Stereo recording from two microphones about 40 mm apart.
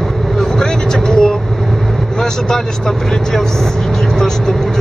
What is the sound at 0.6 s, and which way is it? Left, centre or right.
Vehicle, centre.